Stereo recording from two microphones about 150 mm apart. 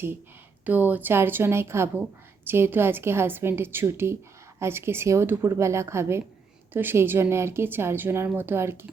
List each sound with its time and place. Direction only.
0.6 s a woman's voice: 10° right (ahead or behind)